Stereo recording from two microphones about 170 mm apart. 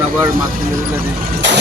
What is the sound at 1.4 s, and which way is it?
Speech, 90° right.